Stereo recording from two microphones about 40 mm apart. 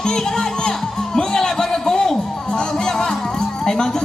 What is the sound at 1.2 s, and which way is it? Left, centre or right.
Music, centre.